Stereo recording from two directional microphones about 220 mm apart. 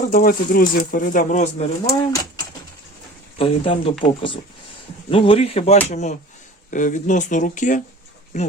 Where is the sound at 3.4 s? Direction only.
25° left (ahead or behind).